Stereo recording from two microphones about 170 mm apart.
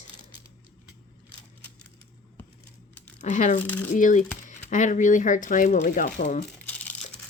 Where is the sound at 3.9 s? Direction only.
50° left (ahead or behind).